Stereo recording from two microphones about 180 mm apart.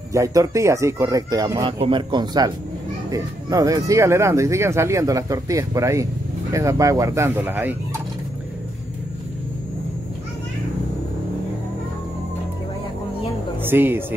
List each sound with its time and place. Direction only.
0.1 s speech: 20° right (ahead or behind)
13.6 s speech: 10° right (ahead or behind)